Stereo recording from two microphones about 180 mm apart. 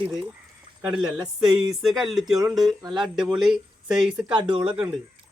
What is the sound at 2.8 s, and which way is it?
Speech, 25° right (ahead or behind).